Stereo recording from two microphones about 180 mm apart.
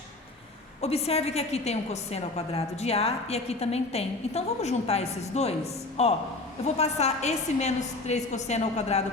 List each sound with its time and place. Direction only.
0.8 s a woman's voice: 35° left (ahead or behind)